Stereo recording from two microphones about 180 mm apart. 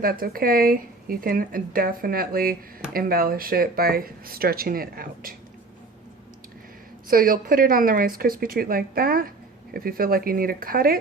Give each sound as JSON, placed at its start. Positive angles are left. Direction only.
{"t": 0.0, "sound": "speech", "side_deg": -55}
{"t": 7.1, "sound": "speech", "side_deg": -55}